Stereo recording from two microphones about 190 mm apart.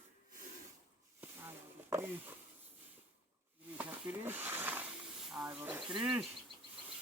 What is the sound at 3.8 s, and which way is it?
Speech, 10° right (ahead or behind).